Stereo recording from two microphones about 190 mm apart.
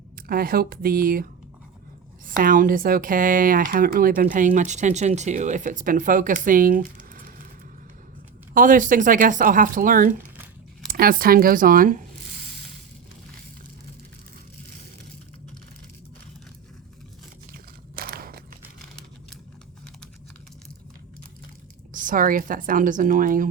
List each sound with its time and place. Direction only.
0.2 s speech: 50° right (ahead or behind)
8.5 s speech: 45° right (ahead or behind)
17.5 s crunch: 50° right (ahead or behind)
21.9 s speech: 45° right (ahead or behind)